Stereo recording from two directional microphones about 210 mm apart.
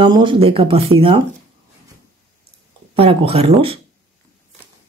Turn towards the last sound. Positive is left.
turn(degrees=-25)  # may be behind; listen again after turning